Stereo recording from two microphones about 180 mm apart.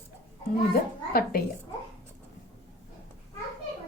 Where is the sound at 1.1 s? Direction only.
55° left (ahead or behind).